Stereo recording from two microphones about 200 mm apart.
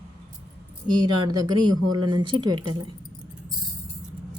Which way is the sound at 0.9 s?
20° right (ahead or behind).